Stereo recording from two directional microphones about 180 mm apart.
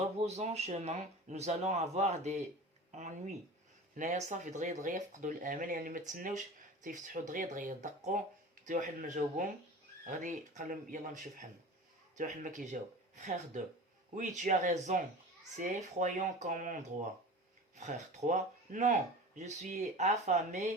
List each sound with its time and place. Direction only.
0.0 s speech: 35° right (ahead or behind)
17.7 s speech: 40° right (ahead or behind)